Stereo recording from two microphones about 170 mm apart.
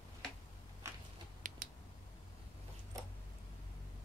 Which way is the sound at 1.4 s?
45° right (ahead or behind).